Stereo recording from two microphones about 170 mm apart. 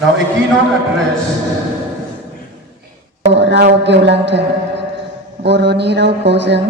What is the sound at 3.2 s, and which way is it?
A woman's voice, 90° right.